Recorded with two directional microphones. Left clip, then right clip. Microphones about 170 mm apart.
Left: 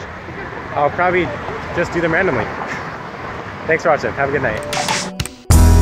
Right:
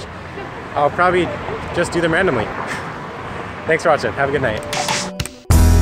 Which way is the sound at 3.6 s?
5° right (ahead or behind).